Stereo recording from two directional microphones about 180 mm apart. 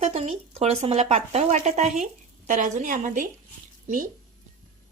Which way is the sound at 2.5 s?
45° right (ahead or behind).